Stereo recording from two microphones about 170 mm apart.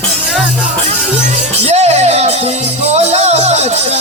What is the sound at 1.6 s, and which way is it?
Music, 40° right (ahead or behind).